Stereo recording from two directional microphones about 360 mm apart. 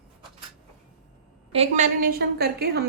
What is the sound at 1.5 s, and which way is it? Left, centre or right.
A woman's voice, centre.